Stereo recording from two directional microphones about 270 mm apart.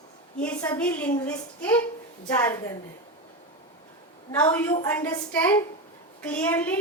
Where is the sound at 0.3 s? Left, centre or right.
Centre.